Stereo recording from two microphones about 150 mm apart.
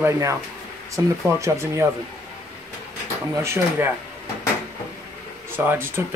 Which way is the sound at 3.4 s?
15° right (ahead or behind).